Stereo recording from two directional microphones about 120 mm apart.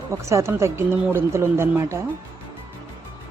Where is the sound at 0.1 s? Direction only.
25° right (ahead or behind).